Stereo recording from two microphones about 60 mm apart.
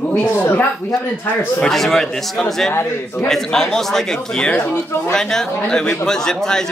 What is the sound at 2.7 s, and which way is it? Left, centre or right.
Speech, left.